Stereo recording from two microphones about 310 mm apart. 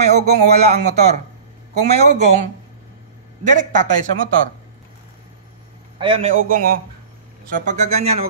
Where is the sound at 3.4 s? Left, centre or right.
Right.